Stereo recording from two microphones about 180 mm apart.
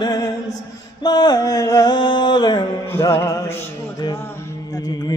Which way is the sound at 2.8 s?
15° left (ahead or behind).